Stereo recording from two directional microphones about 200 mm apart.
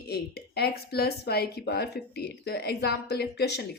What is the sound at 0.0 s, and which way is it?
Speech, 55° left (ahead or behind).